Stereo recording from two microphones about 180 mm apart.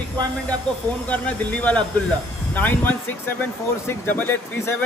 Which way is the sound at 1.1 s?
10° left (ahead or behind).